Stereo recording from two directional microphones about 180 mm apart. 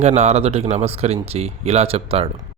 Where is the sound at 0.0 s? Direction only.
40° right (ahead or behind).